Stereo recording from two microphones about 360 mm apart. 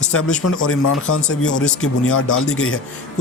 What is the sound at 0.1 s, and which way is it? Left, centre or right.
Speech, left.